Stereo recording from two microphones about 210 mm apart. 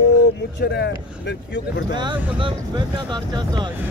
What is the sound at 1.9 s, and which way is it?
Speech, 20° right (ahead or behind).